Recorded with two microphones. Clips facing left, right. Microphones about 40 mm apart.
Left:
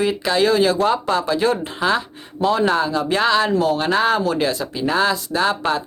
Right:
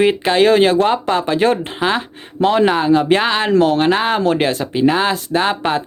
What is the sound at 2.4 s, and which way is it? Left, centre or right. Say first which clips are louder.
Speech: right 4 dB; right.